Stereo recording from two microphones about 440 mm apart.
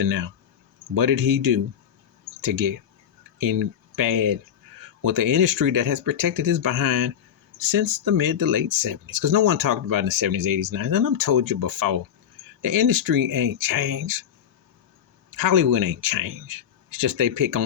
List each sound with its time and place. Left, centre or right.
0.0 s speech: right
15.3 s speech: right